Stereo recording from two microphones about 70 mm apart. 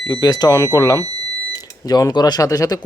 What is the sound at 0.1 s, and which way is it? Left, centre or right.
Speech, left.